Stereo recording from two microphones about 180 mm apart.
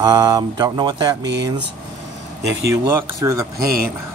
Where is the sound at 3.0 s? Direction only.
20° right (ahead or behind).